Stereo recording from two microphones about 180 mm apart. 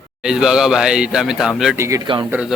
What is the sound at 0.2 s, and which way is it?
Speech, 5° right (ahead or behind).